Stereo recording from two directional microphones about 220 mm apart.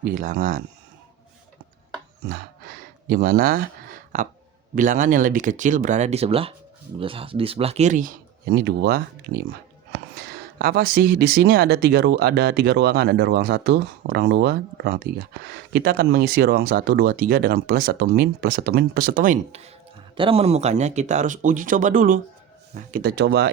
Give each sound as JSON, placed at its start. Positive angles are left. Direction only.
{"t": 0.0, "sound": "speech", "side_deg": -40}
{"t": 2.3, "sound": "a sound", "side_deg": -40}
{"t": 4.7, "sound": "speech", "side_deg": -35}